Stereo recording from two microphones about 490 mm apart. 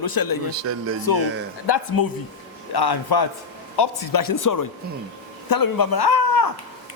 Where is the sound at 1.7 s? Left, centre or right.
Left.